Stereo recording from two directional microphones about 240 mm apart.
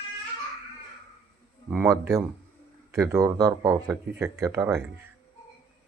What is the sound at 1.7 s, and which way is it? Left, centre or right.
Speech, centre.